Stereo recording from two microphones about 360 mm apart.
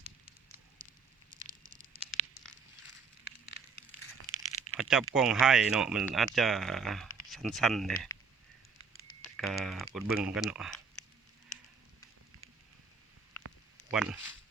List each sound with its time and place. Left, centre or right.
0.5 s fire: centre
1.4 s a sound: centre
4.8 s speech: centre
9.3 s speech: centre
13.9 s speech: centre